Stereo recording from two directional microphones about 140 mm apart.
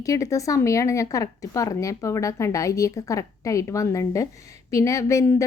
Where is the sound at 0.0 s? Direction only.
25° left (ahead or behind).